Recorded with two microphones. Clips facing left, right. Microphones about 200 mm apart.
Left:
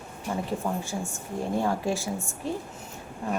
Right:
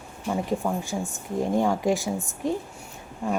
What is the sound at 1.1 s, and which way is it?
A woman's voice, 15° right (ahead or behind).